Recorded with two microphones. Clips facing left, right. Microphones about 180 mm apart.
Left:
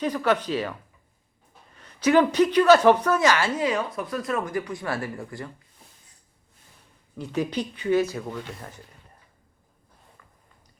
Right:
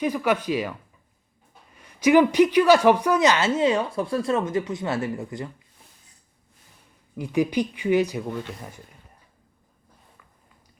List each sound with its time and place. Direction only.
0.0 s speech: 10° right (ahead or behind)
1.7 s speech: 10° right (ahead or behind)
7.2 s speech: 10° right (ahead or behind)
8.5 s speech: centre (ahead or behind)